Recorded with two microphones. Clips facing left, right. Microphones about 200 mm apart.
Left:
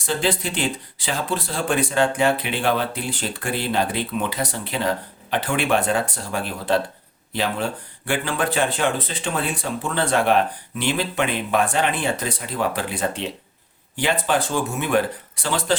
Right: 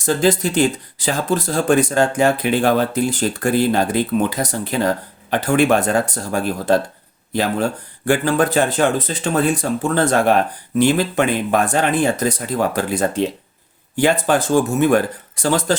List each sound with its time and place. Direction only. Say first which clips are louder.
0.0 s speech: right 7 dB; 45° right (ahead or behind)